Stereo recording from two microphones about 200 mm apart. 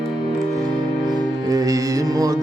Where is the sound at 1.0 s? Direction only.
20° right (ahead or behind).